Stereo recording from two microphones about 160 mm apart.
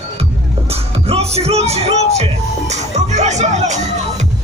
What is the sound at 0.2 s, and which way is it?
Music, 40° right (ahead or behind).